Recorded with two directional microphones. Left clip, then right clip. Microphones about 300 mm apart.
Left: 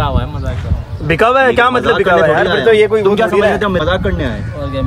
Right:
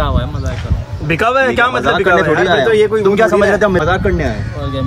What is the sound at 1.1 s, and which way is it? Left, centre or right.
Speech, left.